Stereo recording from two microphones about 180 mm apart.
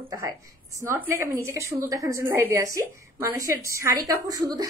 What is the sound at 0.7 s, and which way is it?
A woman's voice, 15° right (ahead or behind).